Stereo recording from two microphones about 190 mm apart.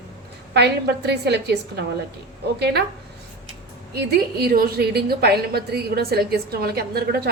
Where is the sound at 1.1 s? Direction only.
60° right (ahead or behind).